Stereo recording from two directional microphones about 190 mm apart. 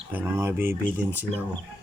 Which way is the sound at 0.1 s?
10° right (ahead or behind).